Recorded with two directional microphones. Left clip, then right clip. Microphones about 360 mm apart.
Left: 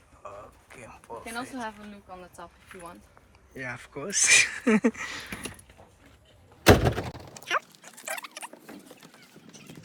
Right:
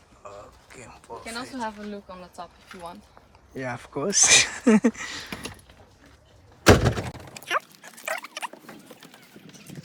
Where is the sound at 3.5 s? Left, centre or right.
Centre.